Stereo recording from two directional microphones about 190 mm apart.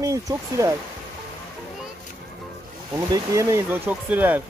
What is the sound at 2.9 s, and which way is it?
Speech, 15° right (ahead or behind).